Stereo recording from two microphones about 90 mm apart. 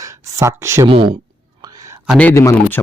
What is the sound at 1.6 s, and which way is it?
Whispering, 40° right (ahead or behind).